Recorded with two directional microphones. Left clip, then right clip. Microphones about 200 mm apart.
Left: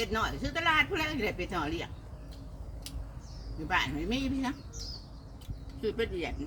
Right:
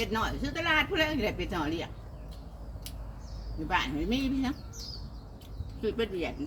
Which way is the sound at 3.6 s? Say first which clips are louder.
Right 1 dB; 15° left (ahead or behind).